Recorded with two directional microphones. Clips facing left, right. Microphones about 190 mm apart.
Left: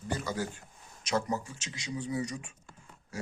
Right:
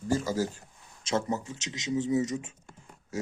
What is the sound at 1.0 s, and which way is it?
Speech, 25° right (ahead or behind).